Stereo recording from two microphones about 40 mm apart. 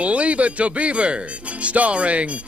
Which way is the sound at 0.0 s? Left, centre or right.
Right.